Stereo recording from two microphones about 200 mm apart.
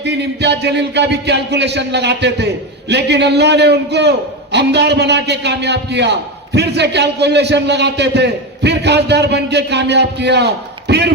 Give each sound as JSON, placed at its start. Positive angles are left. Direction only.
{"t": 0.0, "sound": "a man's voice", "side_deg": -60}